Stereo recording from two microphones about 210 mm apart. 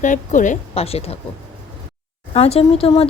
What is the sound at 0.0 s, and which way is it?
Speech, 35° left (ahead or behind).